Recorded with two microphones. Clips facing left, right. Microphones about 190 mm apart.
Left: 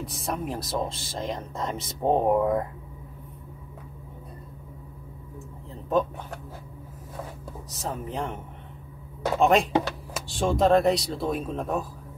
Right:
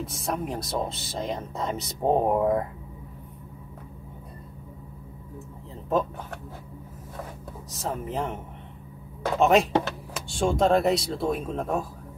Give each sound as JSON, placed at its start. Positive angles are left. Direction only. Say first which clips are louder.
{"t": 0.0, "sound": "speech", "louder": "right 1 dB", "side_deg": 0}
{"t": 5.9, "sound": "speech", "louder": "left 1 dB", "side_deg": 0}
{"t": 7.7, "sound": "speech", "louder": "right 2 dB", "side_deg": 0}
{"t": 9.4, "sound": "speech", "louder": "right 1 dB", "side_deg": 0}